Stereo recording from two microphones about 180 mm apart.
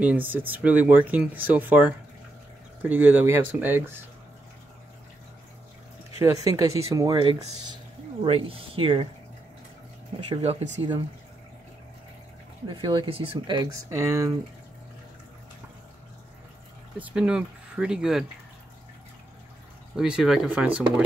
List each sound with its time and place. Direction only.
0.0 s speech: 10° right (ahead or behind)
6.1 s speech: 20° right (ahead or behind)
10.3 s speech: 35° right (ahead or behind)
12.6 s speech: 25° right (ahead or behind)
17.0 s speech: 5° right (ahead or behind)
20.0 s speech: 5° right (ahead or behind)